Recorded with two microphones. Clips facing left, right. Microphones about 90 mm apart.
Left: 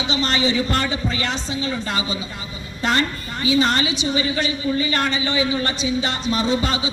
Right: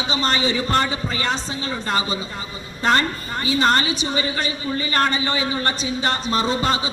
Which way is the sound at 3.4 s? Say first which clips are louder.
Even; 40° right (ahead or behind).